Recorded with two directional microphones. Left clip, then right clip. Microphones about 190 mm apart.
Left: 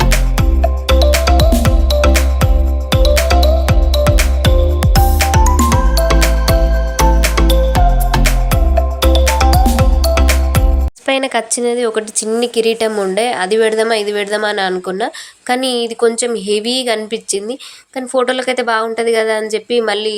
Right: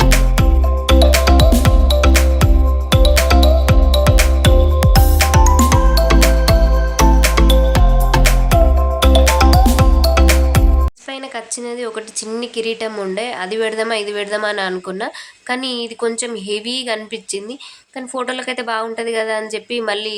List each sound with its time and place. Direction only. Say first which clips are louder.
0.0 s music: even; centre (ahead or behind)
11.0 s a woman's voice: left 12 dB; 45° left (ahead or behind); by 20.1 s 15° left (ahead or behind)